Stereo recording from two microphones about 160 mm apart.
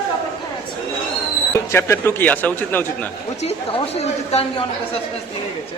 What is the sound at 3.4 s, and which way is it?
A woman's voice, 40° left (ahead or behind).